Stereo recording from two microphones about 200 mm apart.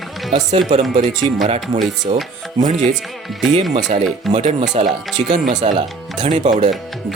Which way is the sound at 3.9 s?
30° right (ahead or behind).